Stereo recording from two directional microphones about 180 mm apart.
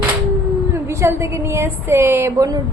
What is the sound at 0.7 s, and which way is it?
A woman's voice, 15° right (ahead or behind).